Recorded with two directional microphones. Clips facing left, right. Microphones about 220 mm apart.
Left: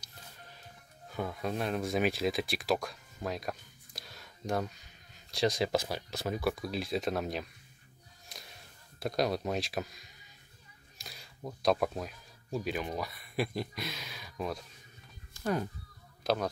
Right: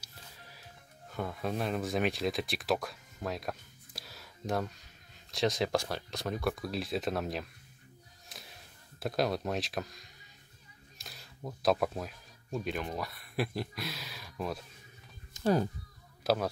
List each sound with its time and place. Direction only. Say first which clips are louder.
0.0 s music: left 1 dB; 5° right (ahead or behind)
1.1 s speech: even; centre (ahead or behind)
8.3 s music: even; centre (ahead or behind)
9.0 s speech: even; centre (ahead or behind)
15.3 s speech: right 4 dB; 30° right (ahead or behind)
16.3 s speech: right 1 dB; 5° right (ahead or behind)